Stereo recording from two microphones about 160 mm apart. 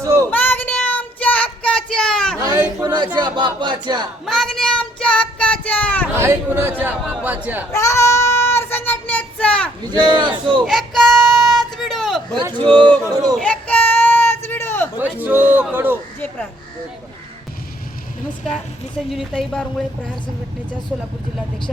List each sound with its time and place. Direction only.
0.0 s child singing: 20° right (ahead or behind)
0.3 s child singing: 10° left (ahead or behind)
2.4 s a sound: 25° right (ahead or behind)
3.2 s speech: 30° right (ahead or behind)
4.3 s child singing: centre (ahead or behind)
6.1 s speech: 15° right (ahead or behind)
7.7 s child singing: 20° left (ahead or behind)
9.9 s speech: 25° right (ahead or behind)
10.6 s music: centre (ahead or behind)
12.5 s speech: 30° right (ahead or behind)
13.3 s a sound: 5° left (ahead or behind)
14.9 s speech: 10° right (ahead or behind)
19.1 s a woman's voice: 5° left (ahead or behind)
20.9 s speech: 5° right (ahead or behind)